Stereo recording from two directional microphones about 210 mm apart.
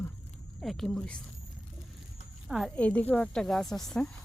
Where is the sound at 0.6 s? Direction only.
Centre (ahead or behind).